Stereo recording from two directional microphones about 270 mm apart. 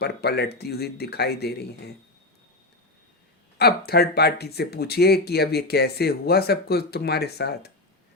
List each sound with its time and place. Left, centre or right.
0.0 s speech: left
3.6 s speech: left